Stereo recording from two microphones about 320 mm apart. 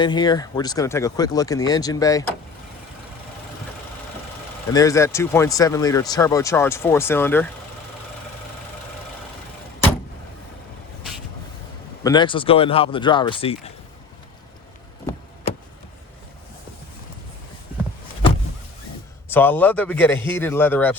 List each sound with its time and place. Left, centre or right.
0.0 s speech: centre
4.7 s speech: centre
12.0 s speech: centre
19.3 s a man's voice: centre